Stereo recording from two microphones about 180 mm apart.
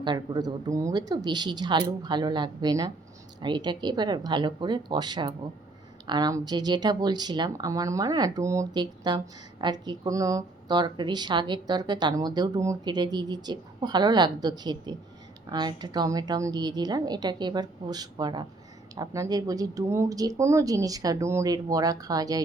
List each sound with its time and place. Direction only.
0.0 s speech: 25° right (ahead or behind)